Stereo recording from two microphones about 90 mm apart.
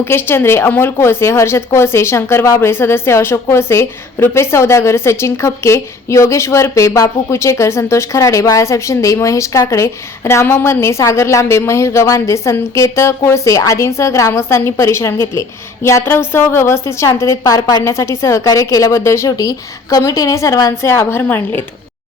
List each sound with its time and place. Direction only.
0.0 s a woman's voice: 25° left (ahead or behind)